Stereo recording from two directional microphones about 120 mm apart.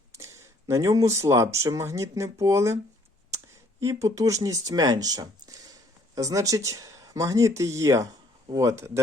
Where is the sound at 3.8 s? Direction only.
25° right (ahead or behind).